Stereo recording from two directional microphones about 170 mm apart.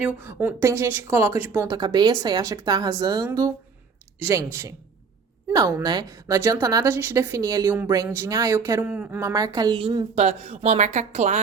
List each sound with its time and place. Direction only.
0.0 s a woman's voice: 10° right (ahead or behind)
9.3 s a woman's voice: 20° right (ahead or behind)
10.2 s speech: 40° right (ahead or behind)